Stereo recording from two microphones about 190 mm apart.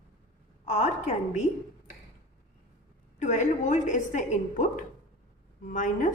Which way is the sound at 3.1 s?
40° left (ahead or behind).